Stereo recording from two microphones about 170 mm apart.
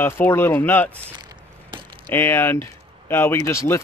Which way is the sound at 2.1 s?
15° left (ahead or behind).